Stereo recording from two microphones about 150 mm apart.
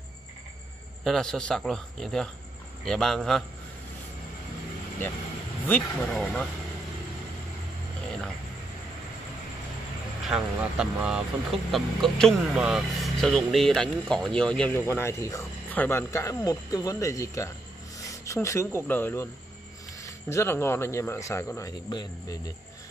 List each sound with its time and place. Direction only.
1.0 s speech: 5° left (ahead or behind)
5.7 s speech: 15° left (ahead or behind)
6.1 s speech: 5° left (ahead or behind)
10.2 s speech: 5° right (ahead or behind)
14.7 s speech: 15° left (ahead or behind)